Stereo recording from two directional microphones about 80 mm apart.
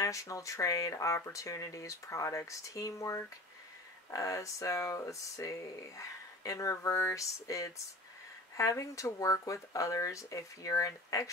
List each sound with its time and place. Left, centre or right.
0.0 s speech: left